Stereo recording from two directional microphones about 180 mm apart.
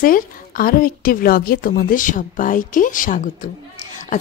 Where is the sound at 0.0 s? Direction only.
50° left (ahead or behind).